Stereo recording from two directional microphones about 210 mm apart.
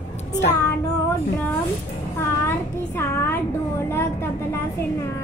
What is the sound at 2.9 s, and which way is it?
A child's voice, 10° left (ahead or behind).